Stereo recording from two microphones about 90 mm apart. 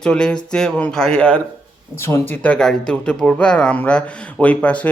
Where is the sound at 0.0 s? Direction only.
10° left (ahead or behind).